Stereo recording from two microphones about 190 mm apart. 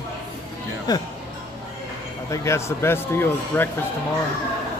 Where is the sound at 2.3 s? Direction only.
15° left (ahead or behind).